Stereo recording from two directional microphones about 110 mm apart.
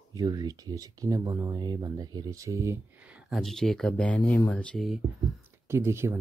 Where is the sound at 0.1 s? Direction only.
35° right (ahead or behind).